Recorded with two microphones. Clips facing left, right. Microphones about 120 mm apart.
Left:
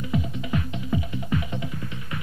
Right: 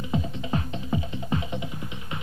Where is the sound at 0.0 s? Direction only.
25° right (ahead or behind).